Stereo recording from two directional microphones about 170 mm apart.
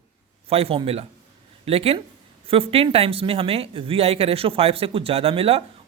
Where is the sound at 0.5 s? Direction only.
35° right (ahead or behind).